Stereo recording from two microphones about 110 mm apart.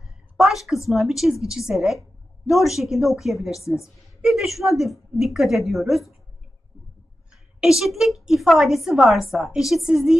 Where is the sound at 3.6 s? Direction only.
25° left (ahead or behind).